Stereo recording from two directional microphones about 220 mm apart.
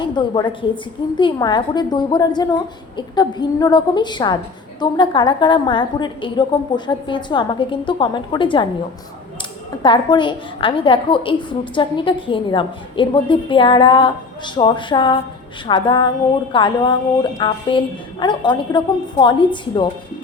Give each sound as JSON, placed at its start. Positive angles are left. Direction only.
{"t": 0.0, "sound": "a woman's voice", "side_deg": 20}
{"t": 9.8, "sound": "a woman's voice", "side_deg": 20}